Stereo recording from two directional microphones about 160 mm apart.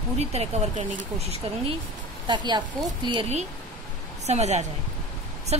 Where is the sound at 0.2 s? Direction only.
40° right (ahead or behind).